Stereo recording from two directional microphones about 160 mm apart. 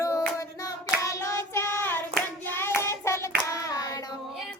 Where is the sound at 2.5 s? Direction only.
15° left (ahead or behind).